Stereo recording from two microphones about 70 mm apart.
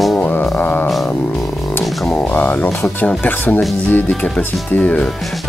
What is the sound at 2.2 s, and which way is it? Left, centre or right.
Speech, left.